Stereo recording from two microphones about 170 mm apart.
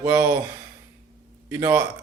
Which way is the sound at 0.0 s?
15° right (ahead or behind).